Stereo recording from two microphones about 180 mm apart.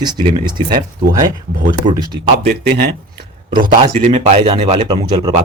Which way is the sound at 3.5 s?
50° right (ahead or behind).